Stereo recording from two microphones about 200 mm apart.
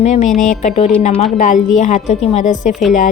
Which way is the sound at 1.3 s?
40° left (ahead or behind).